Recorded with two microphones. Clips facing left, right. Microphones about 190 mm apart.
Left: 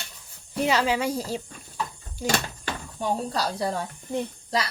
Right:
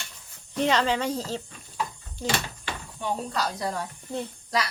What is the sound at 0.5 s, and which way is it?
Speech, 10° left (ahead or behind).